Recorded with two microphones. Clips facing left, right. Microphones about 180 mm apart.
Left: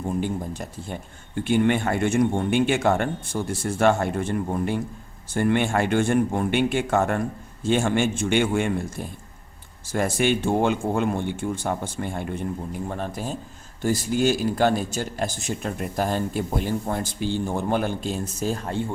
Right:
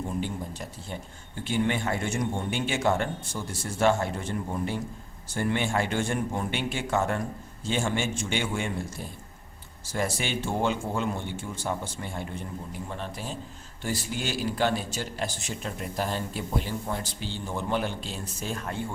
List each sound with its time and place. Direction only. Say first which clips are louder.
0.2 s a man's voice: left 5 dB; 50° left (ahead or behind)
9.8 s a man's voice: left 7 dB; 55° left (ahead or behind); by 18.9 s 30° left (ahead or behind)